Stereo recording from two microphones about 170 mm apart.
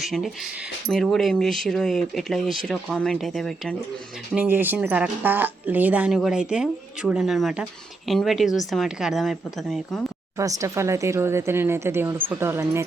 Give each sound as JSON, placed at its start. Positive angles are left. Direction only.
{"t": 0.0, "sound": "speech", "side_deg": 0}
{"t": 4.4, "sound": "speech", "side_deg": -10}
{"t": 10.3, "sound": "speech", "side_deg": -20}